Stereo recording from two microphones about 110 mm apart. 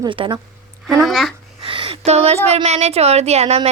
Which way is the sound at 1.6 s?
55° right (ahead or behind).